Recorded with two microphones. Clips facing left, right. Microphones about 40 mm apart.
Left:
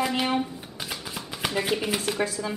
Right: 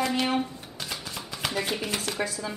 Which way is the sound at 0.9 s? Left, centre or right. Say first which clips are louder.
Left 1 dB; centre.